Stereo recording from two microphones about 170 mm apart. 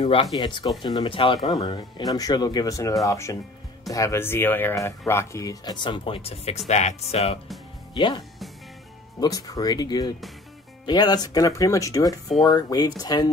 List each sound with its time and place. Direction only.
0.0 s speech: 30° left (ahead or behind)
7.9 s speech: 30° left (ahead or behind)
9.2 s speech: 20° left (ahead or behind)